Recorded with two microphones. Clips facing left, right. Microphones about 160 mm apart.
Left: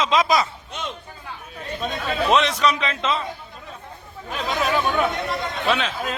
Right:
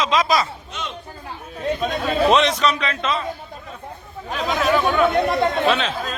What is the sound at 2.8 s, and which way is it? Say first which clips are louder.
Speech: right 1 dB; 20° left (ahead or behind).